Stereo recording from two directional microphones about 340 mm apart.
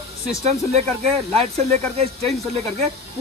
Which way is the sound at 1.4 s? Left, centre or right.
Centre.